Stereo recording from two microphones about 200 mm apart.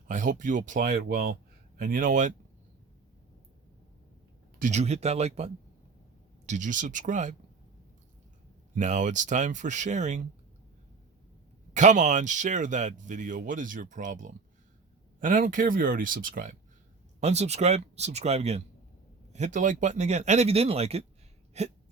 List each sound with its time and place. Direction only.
0.1 s speech: 40° right (ahead or behind)
4.6 s speech: 35° right (ahead or behind)
8.7 s speech: 40° right (ahead or behind)
11.7 s speech: 35° right (ahead or behind)